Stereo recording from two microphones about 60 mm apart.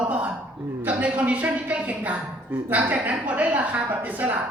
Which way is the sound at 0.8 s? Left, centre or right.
Right.